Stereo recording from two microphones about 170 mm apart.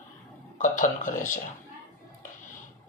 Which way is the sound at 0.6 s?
50° left (ahead or behind).